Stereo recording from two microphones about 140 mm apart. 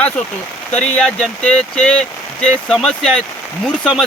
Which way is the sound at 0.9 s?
5° left (ahead or behind).